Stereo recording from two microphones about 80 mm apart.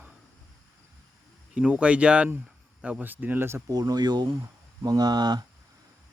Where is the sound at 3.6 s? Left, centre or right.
Right.